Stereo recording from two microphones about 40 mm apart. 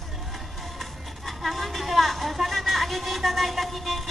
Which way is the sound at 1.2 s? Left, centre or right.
Centre.